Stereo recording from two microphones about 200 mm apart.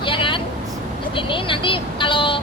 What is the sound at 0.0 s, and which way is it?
Vehicle, 25° left (ahead or behind).